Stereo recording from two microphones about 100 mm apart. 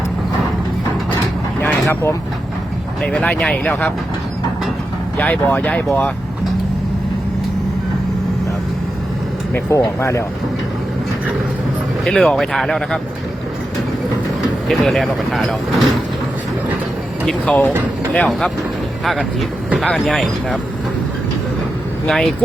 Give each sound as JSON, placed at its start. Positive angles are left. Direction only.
{"t": 3.0, "sound": "speech", "side_deg": 10}
{"t": 5.1, "sound": "speech", "side_deg": 15}
{"t": 9.6, "sound": "speech", "side_deg": 30}
{"t": 12.0, "sound": "speech", "side_deg": 5}
{"t": 14.7, "sound": "speech", "side_deg": 0}
{"t": 17.2, "sound": "speech", "side_deg": 5}
{"t": 22.0, "sound": "speech", "side_deg": 5}